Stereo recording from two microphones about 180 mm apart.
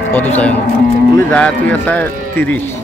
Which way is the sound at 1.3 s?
10° left (ahead or behind).